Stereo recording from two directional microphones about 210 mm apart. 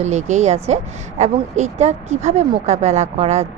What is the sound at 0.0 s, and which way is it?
A woman's voice, 35° right (ahead or behind).